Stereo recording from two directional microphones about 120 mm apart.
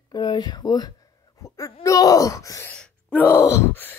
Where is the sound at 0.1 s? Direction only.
40° left (ahead or behind).